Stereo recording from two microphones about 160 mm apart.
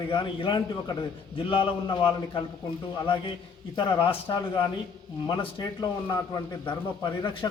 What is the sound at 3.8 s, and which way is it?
A man's voice, 30° left (ahead or behind).